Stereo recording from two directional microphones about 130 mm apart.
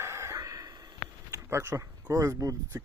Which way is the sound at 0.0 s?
20° right (ahead or behind).